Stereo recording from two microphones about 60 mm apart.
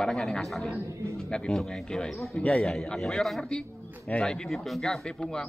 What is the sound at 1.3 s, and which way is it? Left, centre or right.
Speech, centre.